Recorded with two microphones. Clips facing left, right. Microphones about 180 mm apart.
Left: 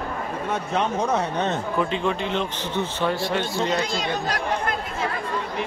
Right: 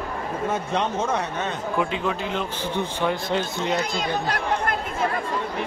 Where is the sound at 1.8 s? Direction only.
5° right (ahead or behind).